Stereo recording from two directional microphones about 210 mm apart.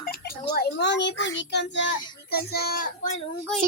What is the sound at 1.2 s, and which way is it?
A child's voice, 55° left (ahead or behind).